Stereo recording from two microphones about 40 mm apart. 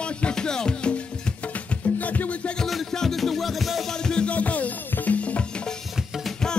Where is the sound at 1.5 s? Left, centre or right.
Left.